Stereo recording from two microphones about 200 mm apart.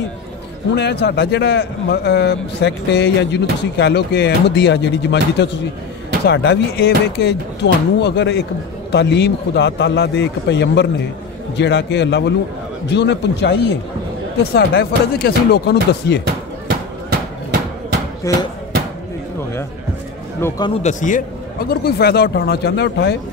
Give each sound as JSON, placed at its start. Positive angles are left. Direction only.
{"t": 0.7, "sound": "a man's voice", "side_deg": 60}
{"t": 18.3, "sound": "speech", "side_deg": 15}
{"t": 20.3, "sound": "speech", "side_deg": 15}
{"t": 20.8, "sound": "speech", "side_deg": 40}
{"t": 21.6, "sound": "speech", "side_deg": 55}